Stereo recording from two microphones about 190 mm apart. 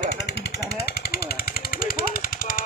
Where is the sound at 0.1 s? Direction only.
60° left (ahead or behind).